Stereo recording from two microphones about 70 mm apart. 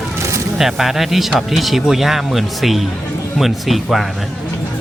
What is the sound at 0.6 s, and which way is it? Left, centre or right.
Speech, centre.